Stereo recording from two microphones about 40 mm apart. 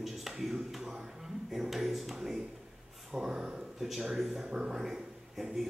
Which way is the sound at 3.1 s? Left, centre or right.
Centre.